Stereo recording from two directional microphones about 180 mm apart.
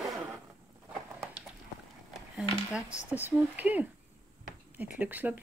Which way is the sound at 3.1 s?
10° right (ahead or behind).